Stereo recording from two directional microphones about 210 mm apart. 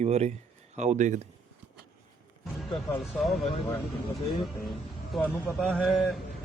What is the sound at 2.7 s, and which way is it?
Speech, centre (ahead or behind).